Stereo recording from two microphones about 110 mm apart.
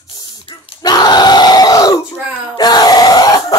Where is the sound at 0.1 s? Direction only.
35° left (ahead or behind).